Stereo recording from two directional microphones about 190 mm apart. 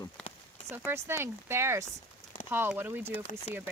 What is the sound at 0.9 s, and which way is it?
Speech, 15° right (ahead or behind).